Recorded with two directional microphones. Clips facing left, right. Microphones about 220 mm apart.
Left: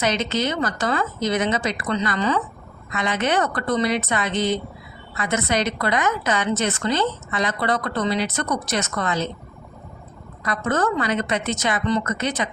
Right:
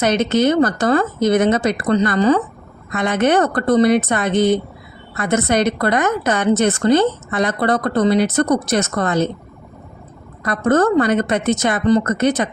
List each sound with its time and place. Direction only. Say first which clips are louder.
0.0 s a woman's voice: right 7 dB; 50° right (ahead or behind)
2.9 s a woman's voice: right 7 dB; 55° right (ahead or behind)
10.4 s a woman's voice: right 7 dB; 50° right (ahead or behind)